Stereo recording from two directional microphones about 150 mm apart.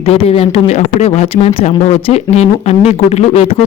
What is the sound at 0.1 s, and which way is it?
Speech, 45° left (ahead or behind).